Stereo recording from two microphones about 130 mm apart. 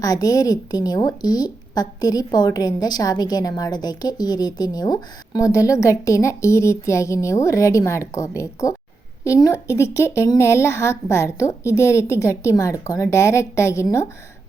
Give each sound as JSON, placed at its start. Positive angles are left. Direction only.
{"t": 0.0, "sound": "a woman's voice", "side_deg": 25}